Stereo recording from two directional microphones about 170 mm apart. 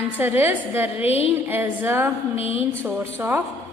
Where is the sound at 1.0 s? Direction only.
35° left (ahead or behind).